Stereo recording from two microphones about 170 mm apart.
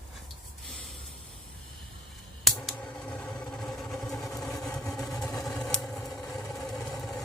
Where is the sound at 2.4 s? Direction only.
Centre (ahead or behind).